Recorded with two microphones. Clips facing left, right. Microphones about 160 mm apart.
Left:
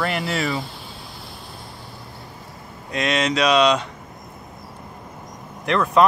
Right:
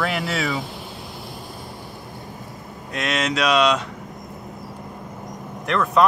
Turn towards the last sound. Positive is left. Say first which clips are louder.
# left 1 dB
turn(degrees=0)  # may be behind; listen again after turning